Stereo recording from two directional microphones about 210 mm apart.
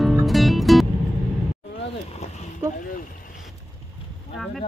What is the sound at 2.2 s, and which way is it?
Boat, 30° left (ahead or behind).